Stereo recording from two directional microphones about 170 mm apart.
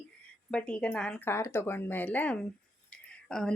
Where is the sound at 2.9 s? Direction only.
5° left (ahead or behind).